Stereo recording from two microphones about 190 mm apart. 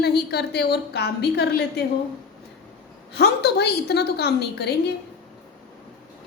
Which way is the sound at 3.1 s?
60° left (ahead or behind).